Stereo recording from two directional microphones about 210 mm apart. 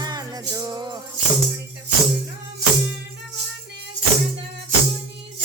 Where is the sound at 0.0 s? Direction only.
20° right (ahead or behind).